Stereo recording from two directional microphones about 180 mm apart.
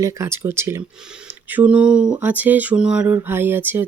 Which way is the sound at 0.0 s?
15° right (ahead or behind).